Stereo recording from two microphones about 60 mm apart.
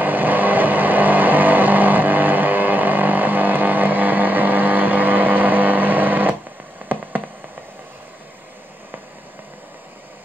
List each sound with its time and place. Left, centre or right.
0.0 s vehicle: right
6.9 s hum: right